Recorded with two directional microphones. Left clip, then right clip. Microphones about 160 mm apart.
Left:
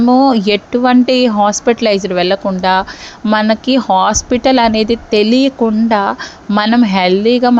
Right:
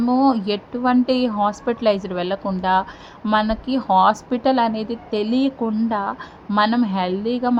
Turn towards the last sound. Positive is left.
turn(degrees=35)  # may be behind; listen again after turning